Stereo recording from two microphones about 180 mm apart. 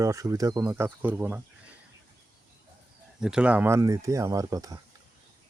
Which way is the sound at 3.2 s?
5° right (ahead or behind).